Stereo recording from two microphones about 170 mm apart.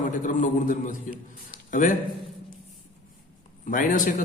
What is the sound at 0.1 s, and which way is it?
A man's voice, 50° left (ahead or behind).